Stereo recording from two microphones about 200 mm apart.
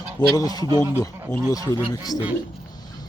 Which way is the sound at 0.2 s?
20° left (ahead or behind).